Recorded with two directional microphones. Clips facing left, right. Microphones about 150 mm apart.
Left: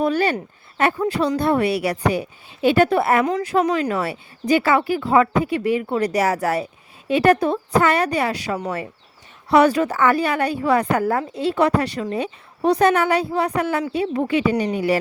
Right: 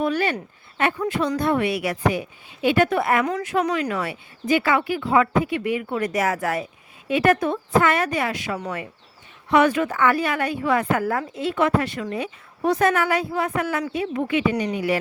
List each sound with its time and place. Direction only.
0.0 s a woman's voice: 35° left (ahead or behind)